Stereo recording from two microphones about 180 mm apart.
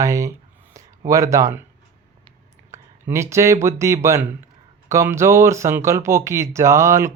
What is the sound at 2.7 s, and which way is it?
Speech, 15° right (ahead or behind).